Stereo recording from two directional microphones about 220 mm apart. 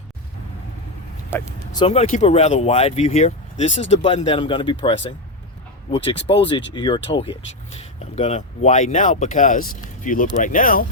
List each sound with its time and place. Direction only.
1.3 s speech: 15° left (ahead or behind); by 10.8 s 40° left (ahead or behind)